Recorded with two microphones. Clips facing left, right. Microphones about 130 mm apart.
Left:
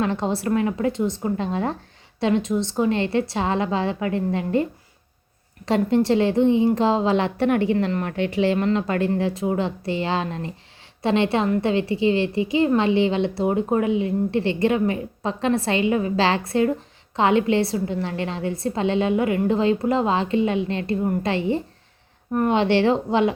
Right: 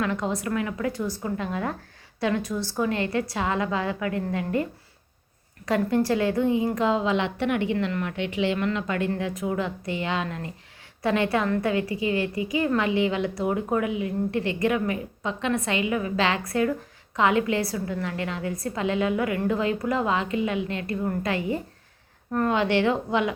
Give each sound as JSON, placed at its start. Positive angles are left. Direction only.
{"t": 0.0, "sound": "a woman's voice", "side_deg": 30}
{"t": 5.6, "sound": "a woman's voice", "side_deg": 25}